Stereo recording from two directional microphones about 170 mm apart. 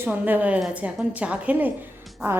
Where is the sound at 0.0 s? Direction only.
10° right (ahead or behind).